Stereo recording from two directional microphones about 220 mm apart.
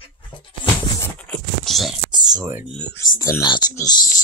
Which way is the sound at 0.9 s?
10° left (ahead or behind).